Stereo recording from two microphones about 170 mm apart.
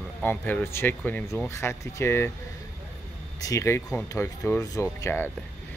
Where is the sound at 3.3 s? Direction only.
20° left (ahead or behind).